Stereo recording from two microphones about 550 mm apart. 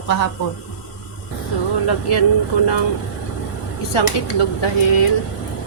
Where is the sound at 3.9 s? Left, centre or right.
Left.